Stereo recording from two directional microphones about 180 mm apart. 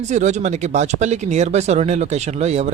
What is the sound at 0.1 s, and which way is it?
Speech, 40° right (ahead or behind).